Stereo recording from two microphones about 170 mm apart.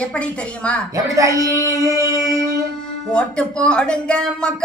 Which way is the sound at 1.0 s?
20° right (ahead or behind).